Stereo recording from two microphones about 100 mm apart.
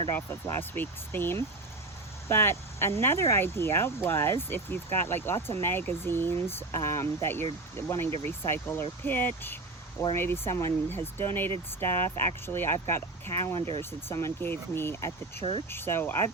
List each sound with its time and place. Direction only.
0.1 s speech: 25° left (ahead or behind)
13.6 s speech: 75° right (ahead or behind)
14.1 s speech: 25° left (ahead or behind)